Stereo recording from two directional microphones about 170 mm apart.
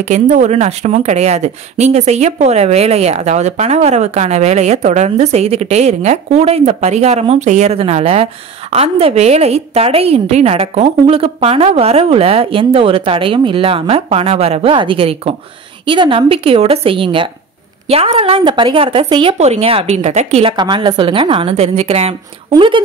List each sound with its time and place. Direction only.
0.1 s a woman's voice: 45° right (ahead or behind); by 22.8 s 30° right (ahead or behind)